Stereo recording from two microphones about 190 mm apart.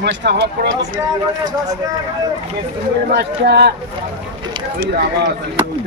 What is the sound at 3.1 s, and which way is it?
Speech, 60° right (ahead or behind).